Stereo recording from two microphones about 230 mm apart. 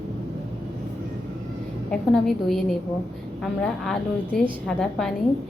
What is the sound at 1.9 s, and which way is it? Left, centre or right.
A woman's voice, centre.